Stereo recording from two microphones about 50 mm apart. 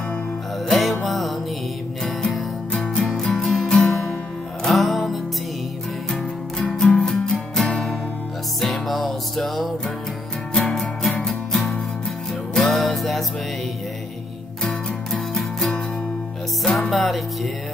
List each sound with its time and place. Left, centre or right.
0.7 s music: centre
2.7 s music: centre
3.0 s music: centre
6.6 s music: centre
14.6 s music: centre